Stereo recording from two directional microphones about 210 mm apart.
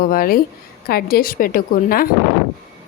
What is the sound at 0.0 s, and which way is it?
Speech, 45° left (ahead or behind).